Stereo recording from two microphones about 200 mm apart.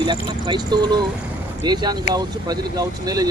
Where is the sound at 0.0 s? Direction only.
20° right (ahead or behind).